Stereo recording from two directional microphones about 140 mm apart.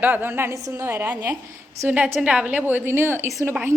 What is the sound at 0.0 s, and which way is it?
A woman's voice, 15° right (ahead or behind).